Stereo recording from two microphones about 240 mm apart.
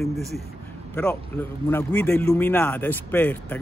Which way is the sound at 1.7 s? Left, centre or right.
Centre.